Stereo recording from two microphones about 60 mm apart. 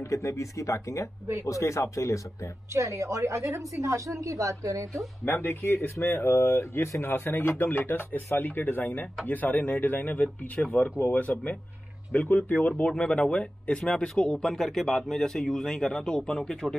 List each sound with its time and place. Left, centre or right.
0.0 s speech: left
2.7 s a woman's voice: right
5.2 s speech: left
10.2 s speech: centre